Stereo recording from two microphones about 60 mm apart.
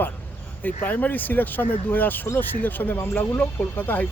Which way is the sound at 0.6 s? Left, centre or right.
Left.